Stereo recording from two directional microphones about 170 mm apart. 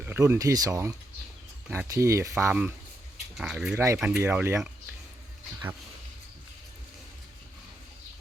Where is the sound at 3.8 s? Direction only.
15° right (ahead or behind).